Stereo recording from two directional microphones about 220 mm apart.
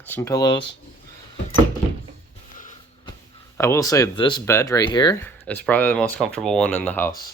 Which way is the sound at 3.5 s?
10° left (ahead or behind).